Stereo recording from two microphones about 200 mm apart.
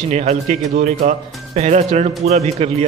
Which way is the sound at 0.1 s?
35° right (ahead or behind).